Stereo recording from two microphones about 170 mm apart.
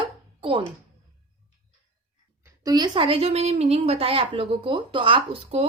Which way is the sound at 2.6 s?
25° right (ahead or behind).